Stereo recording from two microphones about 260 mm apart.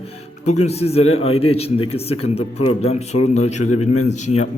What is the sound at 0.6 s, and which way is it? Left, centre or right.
A man's voice, left.